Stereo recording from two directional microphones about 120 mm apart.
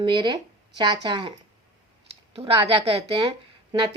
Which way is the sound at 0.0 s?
40° right (ahead or behind).